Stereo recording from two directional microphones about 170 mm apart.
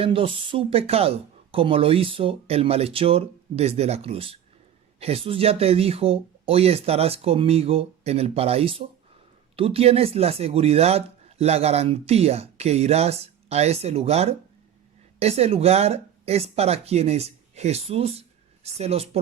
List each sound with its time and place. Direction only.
0.0 s speech: 30° right (ahead or behind)